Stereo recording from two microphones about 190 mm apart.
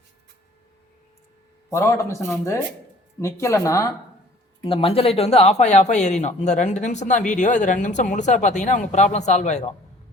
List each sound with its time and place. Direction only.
1.7 s speech: 15° left (ahead or behind)
4.6 s speech: 30° left (ahead or behind)